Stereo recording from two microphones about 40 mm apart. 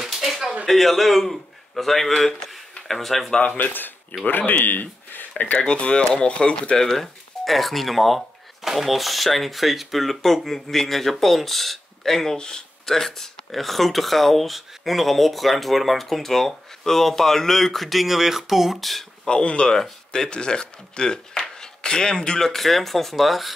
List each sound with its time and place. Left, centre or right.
0.0 s a sound: centre
0.7 s a man's voice: centre
3.5 s speech: left
5.6 s speech: left
6.8 s speech: centre
12.4 s speech: centre
19.2 s speech: left
22.5 s speech: centre